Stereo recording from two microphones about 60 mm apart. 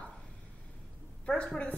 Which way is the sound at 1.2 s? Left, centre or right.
Centre.